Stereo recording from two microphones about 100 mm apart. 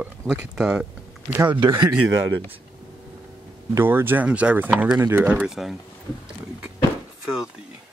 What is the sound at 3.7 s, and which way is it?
Speech, 25° right (ahead or behind).